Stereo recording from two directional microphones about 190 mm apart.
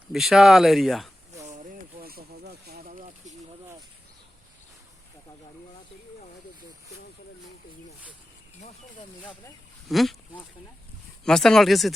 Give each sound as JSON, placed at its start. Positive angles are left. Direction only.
{"t": 0.1, "sound": "speech", "side_deg": 0}
{"t": 2.0, "sound": "a sound", "side_deg": -50}
{"t": 9.9, "sound": "speech", "side_deg": 0}